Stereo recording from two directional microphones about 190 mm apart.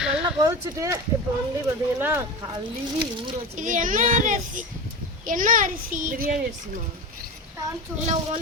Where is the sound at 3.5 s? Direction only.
45° right (ahead or behind).